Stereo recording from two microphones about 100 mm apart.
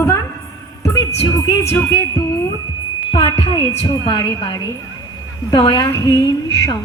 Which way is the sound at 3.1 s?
50° left (ahead or behind).